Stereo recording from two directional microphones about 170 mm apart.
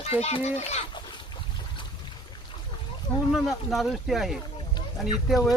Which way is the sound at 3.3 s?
Centre (ahead or behind).